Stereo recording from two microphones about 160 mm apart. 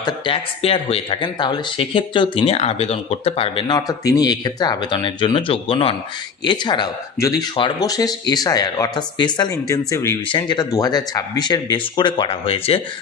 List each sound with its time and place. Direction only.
0.0 s speech: 35° left (ahead or behind)